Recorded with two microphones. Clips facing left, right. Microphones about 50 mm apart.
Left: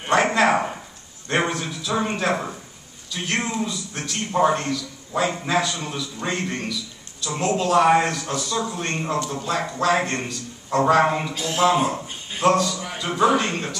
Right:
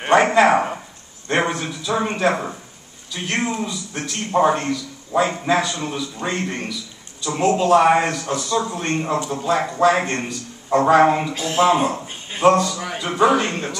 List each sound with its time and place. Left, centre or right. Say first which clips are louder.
0.1 s a sound: right 4 dB; centre
3.6 s a man's voice: right 2 dB; centre
11.3 s speech: right 4 dB; right
12.3 s a man's voice: right 4 dB; centre